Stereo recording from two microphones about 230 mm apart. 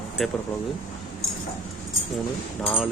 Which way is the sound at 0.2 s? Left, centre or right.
Centre.